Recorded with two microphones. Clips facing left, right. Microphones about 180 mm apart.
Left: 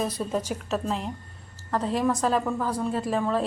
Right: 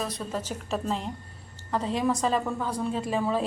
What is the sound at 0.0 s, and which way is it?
Speech, 15° left (ahead or behind).